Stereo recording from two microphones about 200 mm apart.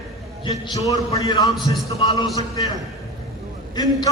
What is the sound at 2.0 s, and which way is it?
Speech, 30° left (ahead or behind).